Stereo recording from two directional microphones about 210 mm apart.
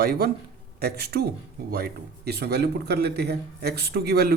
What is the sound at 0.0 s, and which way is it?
Speech, 45° right (ahead or behind).